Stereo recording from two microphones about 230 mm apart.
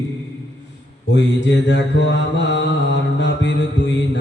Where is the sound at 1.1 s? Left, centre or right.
Left.